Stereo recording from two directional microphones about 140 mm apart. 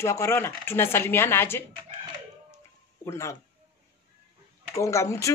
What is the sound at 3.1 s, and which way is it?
Speech, 20° left (ahead or behind).